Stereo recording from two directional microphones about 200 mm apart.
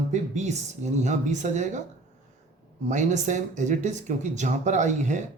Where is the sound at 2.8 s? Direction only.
35° right (ahead or behind).